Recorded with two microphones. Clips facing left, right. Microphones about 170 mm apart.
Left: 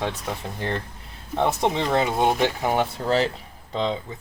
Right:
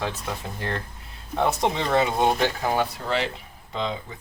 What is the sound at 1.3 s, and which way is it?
Speech, centre (ahead or behind).